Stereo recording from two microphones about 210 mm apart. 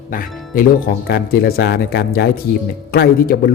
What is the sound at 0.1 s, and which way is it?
Speech, 45° left (ahead or behind).